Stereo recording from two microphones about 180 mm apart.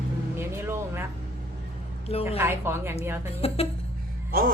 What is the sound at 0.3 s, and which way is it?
Vehicle, 15° right (ahead or behind).